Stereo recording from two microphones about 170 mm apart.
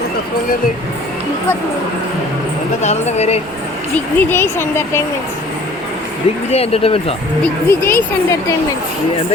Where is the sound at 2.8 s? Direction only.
40° left (ahead or behind).